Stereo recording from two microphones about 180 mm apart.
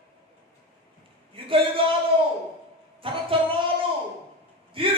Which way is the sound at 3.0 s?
30° right (ahead or behind).